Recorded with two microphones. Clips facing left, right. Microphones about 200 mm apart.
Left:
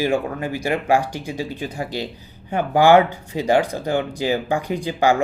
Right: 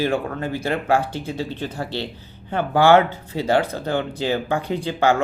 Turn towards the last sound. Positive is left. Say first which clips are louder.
# left 1 dB
turn(degrees=15)  # may be behind; listen again after turning